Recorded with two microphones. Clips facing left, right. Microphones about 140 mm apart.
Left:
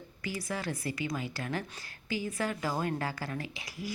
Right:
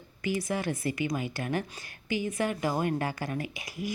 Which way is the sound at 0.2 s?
20° right (ahead or behind).